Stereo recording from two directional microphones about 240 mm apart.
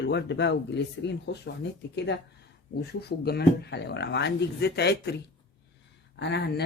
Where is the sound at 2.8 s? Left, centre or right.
Left.